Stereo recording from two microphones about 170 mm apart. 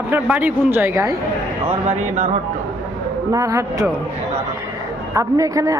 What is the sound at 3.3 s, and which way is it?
Speech, 20° right (ahead or behind).